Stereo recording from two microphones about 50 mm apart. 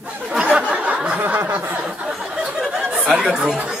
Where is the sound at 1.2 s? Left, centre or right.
Right.